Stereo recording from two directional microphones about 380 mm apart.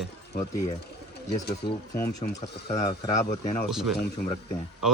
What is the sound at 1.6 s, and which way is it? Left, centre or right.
Speech, centre.